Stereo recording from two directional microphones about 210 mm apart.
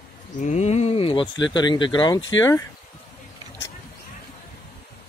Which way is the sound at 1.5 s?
20° left (ahead or behind).